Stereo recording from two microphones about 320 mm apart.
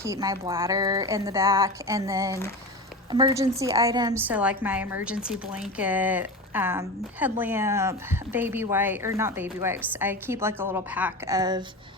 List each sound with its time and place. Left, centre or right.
0.0 s a woman's voice: centre